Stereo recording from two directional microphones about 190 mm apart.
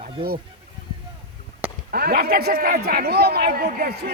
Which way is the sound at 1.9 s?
55° right (ahead or behind).